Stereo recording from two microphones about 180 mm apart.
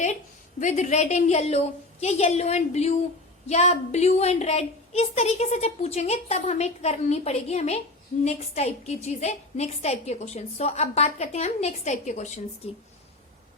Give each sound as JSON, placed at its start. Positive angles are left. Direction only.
{"t": 0.6, "sound": "a woman's voice", "side_deg": 45}